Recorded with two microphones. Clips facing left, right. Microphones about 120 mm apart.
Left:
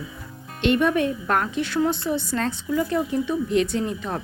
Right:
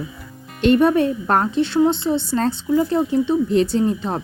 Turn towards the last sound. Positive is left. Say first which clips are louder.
# right 6 dB
turn(degrees=-30)  # may be behind; listen again after turning